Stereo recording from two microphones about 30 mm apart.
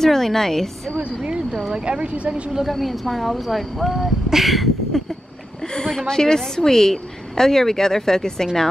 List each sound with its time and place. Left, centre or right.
0.0 s a woman's voice: centre
1.9 s a woman's voice: right
2.7 s speech: centre
5.7 s a sound: centre
6.0 s a woman's voice: centre